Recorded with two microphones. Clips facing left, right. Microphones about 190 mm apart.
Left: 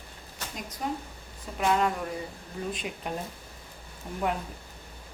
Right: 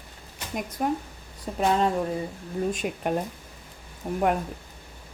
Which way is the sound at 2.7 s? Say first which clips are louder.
Right 7 dB; 50° right (ahead or behind).